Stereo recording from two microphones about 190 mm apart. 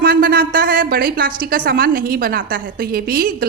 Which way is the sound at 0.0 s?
50° right (ahead or behind).